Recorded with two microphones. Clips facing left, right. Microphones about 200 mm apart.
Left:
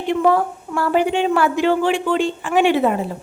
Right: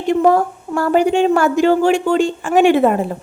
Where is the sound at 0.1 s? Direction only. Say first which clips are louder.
Right 3 dB; 40° right (ahead or behind).